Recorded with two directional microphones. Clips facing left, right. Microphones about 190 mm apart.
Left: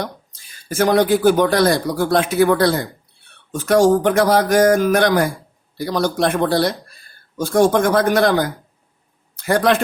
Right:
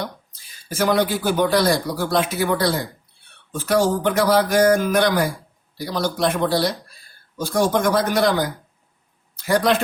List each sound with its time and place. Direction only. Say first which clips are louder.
0.7 s a man's voice: left 5 dB; 45° left (ahead or behind)